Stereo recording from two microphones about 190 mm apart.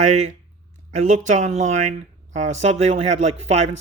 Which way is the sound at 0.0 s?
35° right (ahead or behind).